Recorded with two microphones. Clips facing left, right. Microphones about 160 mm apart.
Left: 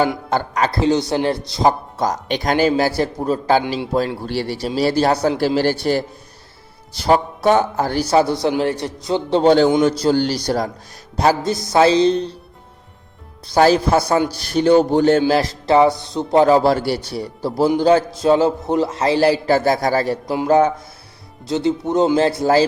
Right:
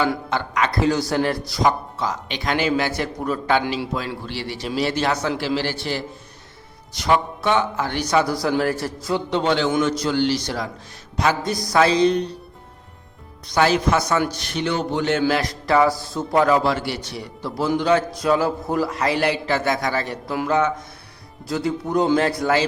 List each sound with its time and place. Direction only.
0.3 s a man's voice: 40° left (ahead or behind)
2.0 s a man's voice: 45° left (ahead or behind); by 9.2 s 20° left (ahead or behind)
9.3 s a man's voice: 40° left (ahead or behind)
13.5 s a man's voice: 35° left (ahead or behind)
21.4 s speech: 25° left (ahead or behind)